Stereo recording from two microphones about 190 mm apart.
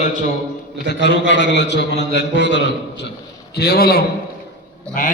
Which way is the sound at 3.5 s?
55° left (ahead or behind).